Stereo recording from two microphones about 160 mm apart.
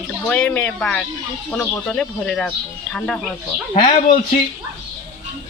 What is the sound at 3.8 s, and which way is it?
Speech, 45° left (ahead or behind).